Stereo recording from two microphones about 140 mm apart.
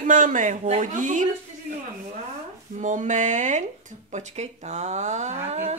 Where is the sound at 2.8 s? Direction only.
65° right (ahead or behind).